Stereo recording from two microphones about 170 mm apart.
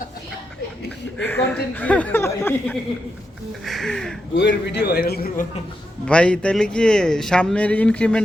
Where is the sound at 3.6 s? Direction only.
Centre (ahead or behind).